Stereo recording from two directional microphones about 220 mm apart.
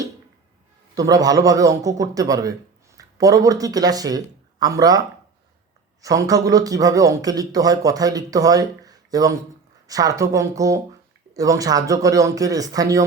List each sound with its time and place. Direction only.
0.9 s speech: 15° right (ahead or behind)